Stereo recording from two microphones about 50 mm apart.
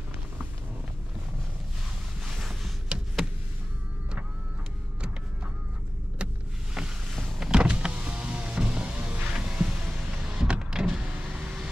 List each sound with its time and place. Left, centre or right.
2.2 s a sound: centre
2.9 s a sound: centre
6.7 s boat: centre
7.1 s vehicle: centre
7.5 s power windows: centre
9.3 s music: centre
10.2 s power windows: centre